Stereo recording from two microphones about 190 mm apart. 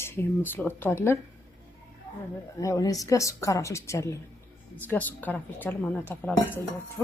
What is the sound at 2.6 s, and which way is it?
Speech, 15° left (ahead or behind).